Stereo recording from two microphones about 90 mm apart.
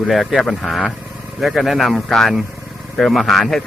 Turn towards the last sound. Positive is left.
turn(degrees=5)  # may be behind; listen again after turning